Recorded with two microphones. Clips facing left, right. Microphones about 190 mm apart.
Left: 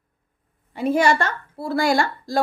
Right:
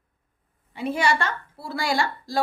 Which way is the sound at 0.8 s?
45° left (ahead or behind).